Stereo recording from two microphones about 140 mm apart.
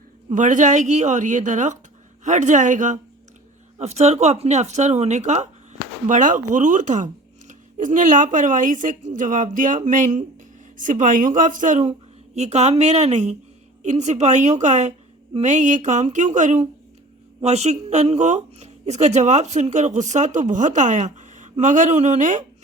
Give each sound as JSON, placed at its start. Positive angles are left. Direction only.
{"t": 0.3, "sound": "speech", "side_deg": -60}
{"t": 3.8, "sound": "speech", "side_deg": -50}